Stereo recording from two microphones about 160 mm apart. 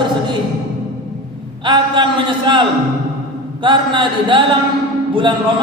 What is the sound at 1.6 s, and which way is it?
A man's voice, 30° right (ahead or behind).